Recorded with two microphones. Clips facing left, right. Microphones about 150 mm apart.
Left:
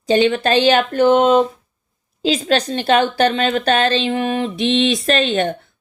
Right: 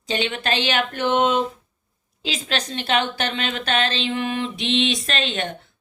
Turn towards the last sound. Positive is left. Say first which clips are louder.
# left 9 dB
turn(degrees=40)  # may be behind; listen again after turning